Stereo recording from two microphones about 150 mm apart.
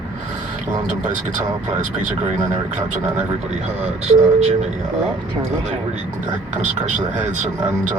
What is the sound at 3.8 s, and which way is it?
Speech, 45° right (ahead or behind).